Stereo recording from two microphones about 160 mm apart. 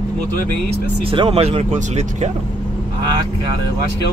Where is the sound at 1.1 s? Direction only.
35° right (ahead or behind).